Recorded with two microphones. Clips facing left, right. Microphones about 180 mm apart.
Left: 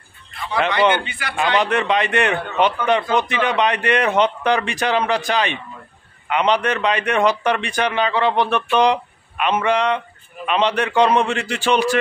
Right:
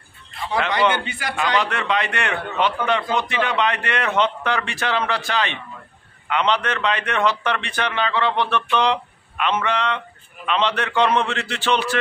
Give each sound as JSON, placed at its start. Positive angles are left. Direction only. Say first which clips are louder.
{"t": 1.3, "sound": "a man's voice", "louder": "left 4 dB", "side_deg": 20}